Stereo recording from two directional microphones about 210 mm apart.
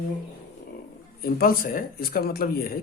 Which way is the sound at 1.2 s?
45° left (ahead or behind).